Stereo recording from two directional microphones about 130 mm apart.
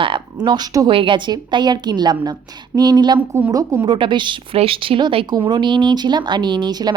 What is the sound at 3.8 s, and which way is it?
A woman's voice, 40° right (ahead or behind).